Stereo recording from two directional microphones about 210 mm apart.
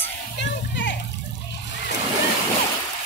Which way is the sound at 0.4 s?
60° left (ahead or behind).